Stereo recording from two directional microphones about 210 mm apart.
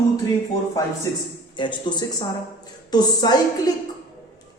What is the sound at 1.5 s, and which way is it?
A woman's voice, 20° left (ahead or behind).